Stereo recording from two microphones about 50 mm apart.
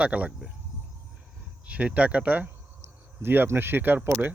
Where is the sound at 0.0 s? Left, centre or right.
Right.